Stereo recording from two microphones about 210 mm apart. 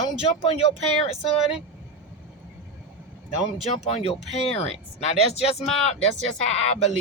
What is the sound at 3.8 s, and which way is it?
Speech, 30° left (ahead or behind).